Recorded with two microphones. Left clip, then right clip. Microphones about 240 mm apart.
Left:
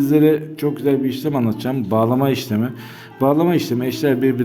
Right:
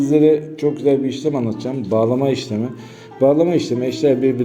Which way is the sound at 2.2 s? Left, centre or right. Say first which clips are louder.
Even; left.